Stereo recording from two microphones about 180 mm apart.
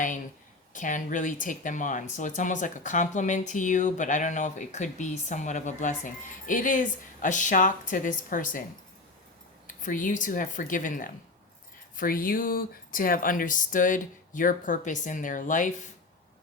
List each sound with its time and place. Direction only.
0.7 s speech: 45° left (ahead or behind)
9.6 s speech: 50° left (ahead or behind)